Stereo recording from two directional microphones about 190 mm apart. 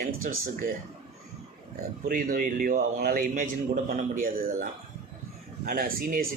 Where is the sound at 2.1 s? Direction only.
45° right (ahead or behind).